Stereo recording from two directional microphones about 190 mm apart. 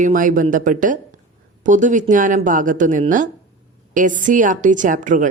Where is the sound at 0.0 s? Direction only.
45° right (ahead or behind).